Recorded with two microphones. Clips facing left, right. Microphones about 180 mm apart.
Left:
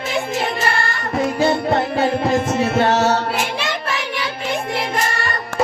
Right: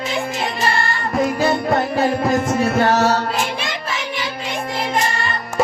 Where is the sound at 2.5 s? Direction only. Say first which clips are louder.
Even; 25° left (ahead or behind).